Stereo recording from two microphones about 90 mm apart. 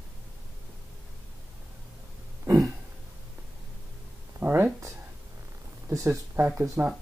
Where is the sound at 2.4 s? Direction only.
35° right (ahead or behind).